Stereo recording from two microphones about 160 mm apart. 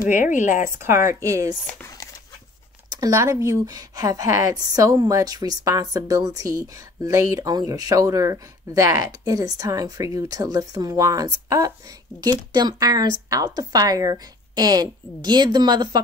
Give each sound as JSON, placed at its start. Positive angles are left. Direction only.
{"t": 0.1, "sound": "speech", "side_deg": 55}
{"t": 0.7, "sound": "speech", "side_deg": -15}
{"t": 2.9, "sound": "speech", "side_deg": -20}